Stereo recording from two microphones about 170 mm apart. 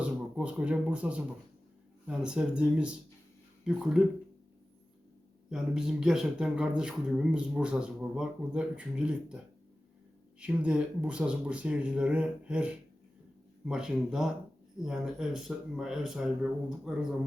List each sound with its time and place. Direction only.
0.0 s speech: 5° right (ahead or behind)
5.5 s speech: 5° right (ahead or behind)
10.4 s speech: 5° right (ahead or behind)